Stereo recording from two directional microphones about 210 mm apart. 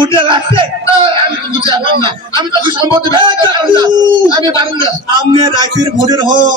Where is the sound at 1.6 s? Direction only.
20° right (ahead or behind).